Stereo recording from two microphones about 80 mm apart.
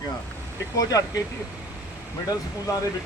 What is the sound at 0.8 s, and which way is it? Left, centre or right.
Speech, left.